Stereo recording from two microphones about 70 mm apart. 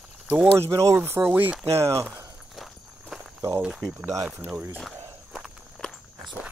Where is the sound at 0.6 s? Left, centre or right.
Right.